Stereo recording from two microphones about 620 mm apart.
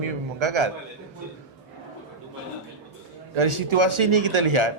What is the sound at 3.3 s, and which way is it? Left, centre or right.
A man's voice, right.